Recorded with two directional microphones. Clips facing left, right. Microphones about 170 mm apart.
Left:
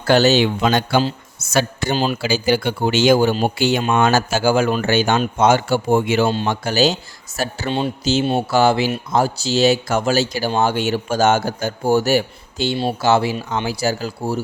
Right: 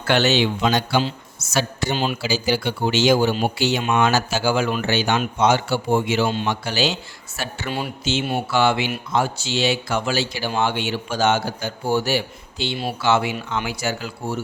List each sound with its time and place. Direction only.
0.0 s speech: 40° left (ahead or behind)
0.4 s speech: 55° left (ahead or behind)
6.2 s speech: 35° left (ahead or behind)
7.7 s speech: 25° left (ahead or behind)
8.0 s speech: 40° left (ahead or behind)